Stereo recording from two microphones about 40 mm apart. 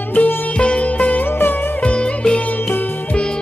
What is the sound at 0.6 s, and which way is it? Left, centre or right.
Music, left.